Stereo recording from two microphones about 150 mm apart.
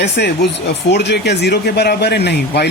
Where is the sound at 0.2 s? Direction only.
90° left.